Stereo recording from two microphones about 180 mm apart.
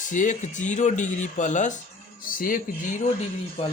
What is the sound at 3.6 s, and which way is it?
Speech, 35° left (ahead or behind).